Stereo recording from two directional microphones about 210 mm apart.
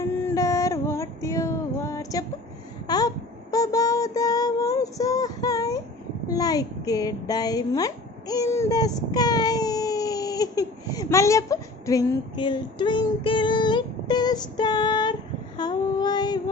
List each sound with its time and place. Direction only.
0.0 s a sound: 15° left (ahead or behind)
3.5 s child singing: 15° left (ahead or behind)
6.2 s a woman's voice: 15° left (ahead or behind)
15.5 s child singing: 20° left (ahead or behind)